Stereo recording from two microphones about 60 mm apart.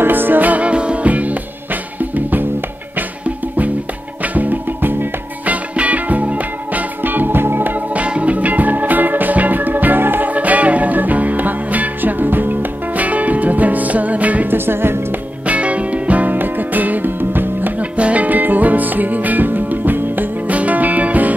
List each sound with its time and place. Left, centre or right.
0.0 s music: right
15.4 s music: right